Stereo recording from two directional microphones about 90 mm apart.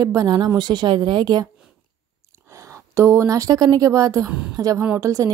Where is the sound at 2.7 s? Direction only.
35° right (ahead or behind).